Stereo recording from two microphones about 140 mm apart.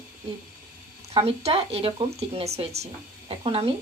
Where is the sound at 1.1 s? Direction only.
45° right (ahead or behind).